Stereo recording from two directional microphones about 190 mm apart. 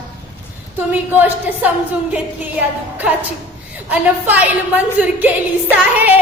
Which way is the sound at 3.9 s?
10° right (ahead or behind).